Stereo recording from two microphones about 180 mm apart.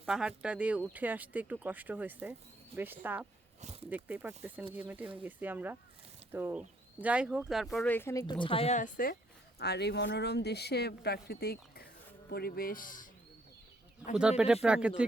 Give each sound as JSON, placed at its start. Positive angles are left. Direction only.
{"t": 0.0, "sound": "speech", "side_deg": -5}
{"t": 3.6, "sound": "speech", "side_deg": -35}
{"t": 3.8, "sound": "speech", "side_deg": -10}
{"t": 7.9, "sound": "speech", "side_deg": 15}
{"t": 9.6, "sound": "speech", "side_deg": 65}
{"t": 14.2, "sound": "speech", "side_deg": -5}